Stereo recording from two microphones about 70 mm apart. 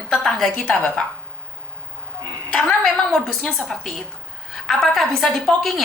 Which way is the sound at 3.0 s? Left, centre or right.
Centre.